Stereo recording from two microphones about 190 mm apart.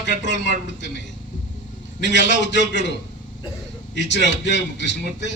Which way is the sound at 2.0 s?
65° left (ahead or behind).